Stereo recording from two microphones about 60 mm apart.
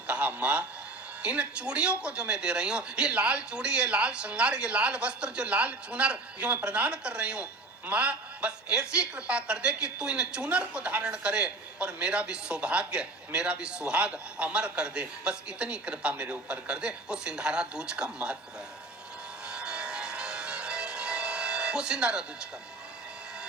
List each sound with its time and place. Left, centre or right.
0.1 s a sound: right
1.2 s a woman's voice: centre
19.5 s music: centre